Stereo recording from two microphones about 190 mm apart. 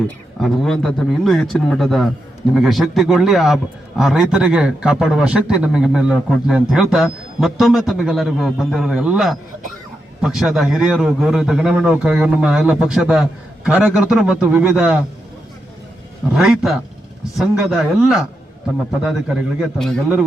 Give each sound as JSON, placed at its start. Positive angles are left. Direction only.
{"t": 0.3, "sound": "a man's voice", "side_deg": 0}
{"t": 16.3, "sound": "a man's voice", "side_deg": -5}